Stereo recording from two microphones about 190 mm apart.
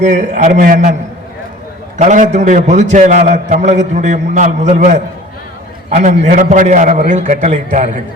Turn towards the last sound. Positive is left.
turn(degrees=-35)  # may be behind; listen again after turning